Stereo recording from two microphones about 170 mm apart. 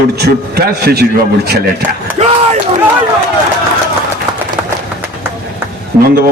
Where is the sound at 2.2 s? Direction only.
40° right (ahead or behind).